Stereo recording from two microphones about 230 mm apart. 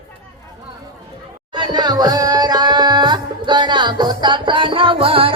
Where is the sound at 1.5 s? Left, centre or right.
Centre.